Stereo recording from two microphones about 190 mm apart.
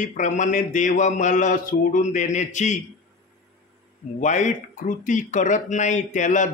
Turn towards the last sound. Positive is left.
turn(degrees=40)  # may be behind; listen again after turning